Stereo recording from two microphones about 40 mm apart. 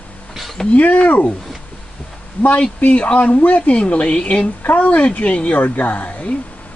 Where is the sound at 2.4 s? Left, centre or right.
Left.